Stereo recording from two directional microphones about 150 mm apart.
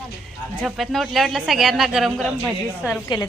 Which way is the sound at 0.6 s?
Centre (ahead or behind).